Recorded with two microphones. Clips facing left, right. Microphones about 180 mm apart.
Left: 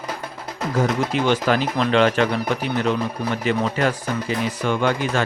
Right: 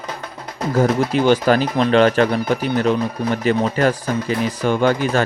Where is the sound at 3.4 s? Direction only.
40° right (ahead or behind).